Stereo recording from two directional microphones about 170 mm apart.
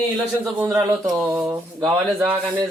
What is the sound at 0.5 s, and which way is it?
A man's voice, 15° right (ahead or behind).